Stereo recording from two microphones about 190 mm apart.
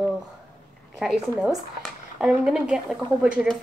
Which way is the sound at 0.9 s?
Centre (ahead or behind).